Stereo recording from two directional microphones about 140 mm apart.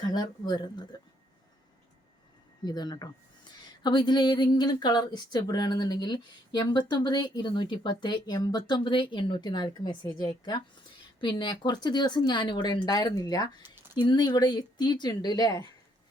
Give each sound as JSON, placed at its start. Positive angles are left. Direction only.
{"t": 0.0, "sound": "speech", "side_deg": 30}
{"t": 2.6, "sound": "speech", "side_deg": 30}